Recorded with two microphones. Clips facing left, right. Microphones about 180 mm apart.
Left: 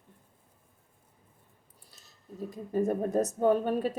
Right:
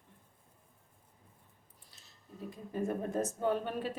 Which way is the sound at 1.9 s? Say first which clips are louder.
Left 7 dB; 40° left (ahead or behind).